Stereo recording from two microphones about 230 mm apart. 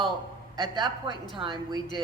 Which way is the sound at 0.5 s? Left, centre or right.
Centre.